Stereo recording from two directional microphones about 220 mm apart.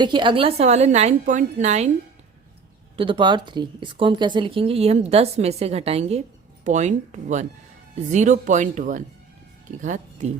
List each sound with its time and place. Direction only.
0.0 s a woman's voice: 20° right (ahead or behind)
2.9 s a woman's voice: 25° right (ahead or behind)